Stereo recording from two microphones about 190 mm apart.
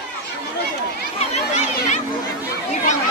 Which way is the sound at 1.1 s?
35° left (ahead or behind).